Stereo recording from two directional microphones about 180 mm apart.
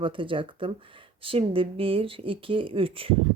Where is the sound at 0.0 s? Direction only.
30° right (ahead or behind).